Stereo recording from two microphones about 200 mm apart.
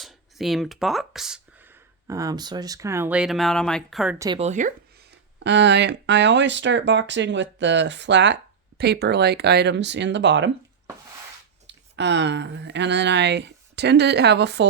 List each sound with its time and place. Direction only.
0.0 s speech: centre (ahead or behind)
4.4 s speech: 35° right (ahead or behind)
5.4 s speech: 60° right (ahead or behind)
11.6 s speech: 60° right (ahead or behind)